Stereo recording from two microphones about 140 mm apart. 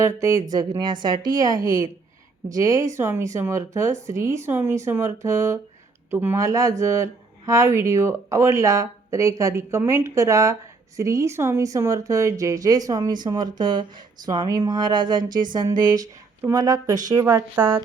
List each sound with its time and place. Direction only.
0.0 s speech: 20° right (ahead or behind)